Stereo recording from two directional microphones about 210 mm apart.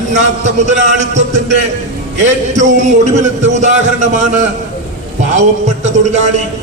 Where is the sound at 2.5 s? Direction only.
35° right (ahead or behind).